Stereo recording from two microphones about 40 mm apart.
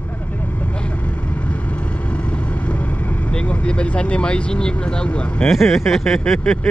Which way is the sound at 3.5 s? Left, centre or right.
Left.